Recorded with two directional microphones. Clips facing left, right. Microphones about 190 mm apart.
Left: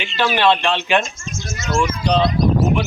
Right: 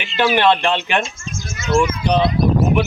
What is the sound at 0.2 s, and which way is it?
Speech, 15° right (ahead or behind).